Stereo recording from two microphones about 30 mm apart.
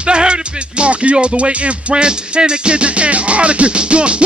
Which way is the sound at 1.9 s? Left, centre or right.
Right.